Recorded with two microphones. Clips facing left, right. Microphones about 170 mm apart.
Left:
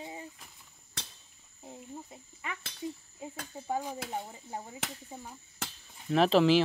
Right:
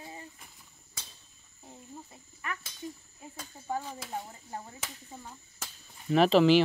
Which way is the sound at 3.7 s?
15° left (ahead or behind).